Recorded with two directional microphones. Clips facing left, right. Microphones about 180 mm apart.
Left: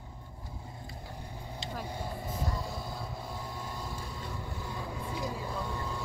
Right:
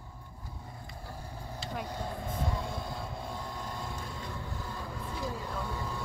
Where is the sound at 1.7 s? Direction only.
10° left (ahead or behind).